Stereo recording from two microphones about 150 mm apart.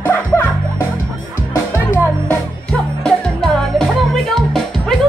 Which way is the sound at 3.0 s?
5° left (ahead or behind).